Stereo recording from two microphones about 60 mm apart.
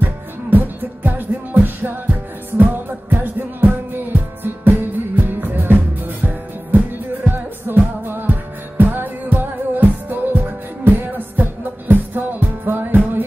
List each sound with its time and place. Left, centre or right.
0.0 s music: right
7.3 s music: right